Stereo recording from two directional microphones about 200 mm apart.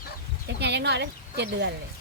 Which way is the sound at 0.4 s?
60° right (ahead or behind).